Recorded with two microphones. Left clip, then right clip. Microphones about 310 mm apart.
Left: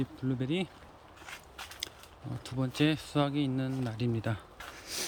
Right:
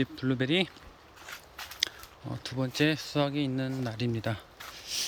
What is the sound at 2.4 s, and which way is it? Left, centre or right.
Speech, centre.